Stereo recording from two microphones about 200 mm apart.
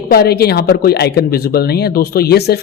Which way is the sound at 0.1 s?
50° left (ahead or behind).